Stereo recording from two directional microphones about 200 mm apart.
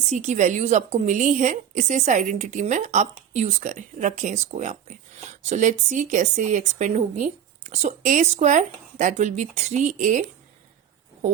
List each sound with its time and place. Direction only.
0.1 s a woman's voice: 35° right (ahead or behind)